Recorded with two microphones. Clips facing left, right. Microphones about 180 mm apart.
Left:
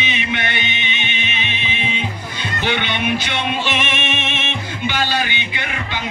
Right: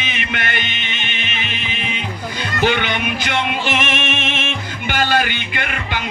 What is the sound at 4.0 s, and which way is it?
Music, 50° right (ahead or behind).